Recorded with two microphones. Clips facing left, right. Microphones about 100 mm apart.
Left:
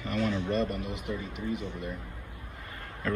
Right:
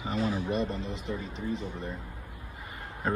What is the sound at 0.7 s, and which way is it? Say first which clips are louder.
Speech: even; 25° right (ahead or behind).